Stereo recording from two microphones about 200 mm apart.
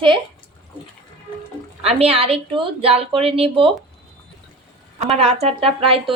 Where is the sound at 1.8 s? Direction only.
30° right (ahead or behind).